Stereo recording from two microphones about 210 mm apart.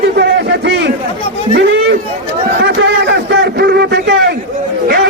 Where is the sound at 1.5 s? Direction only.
55° right (ahead or behind).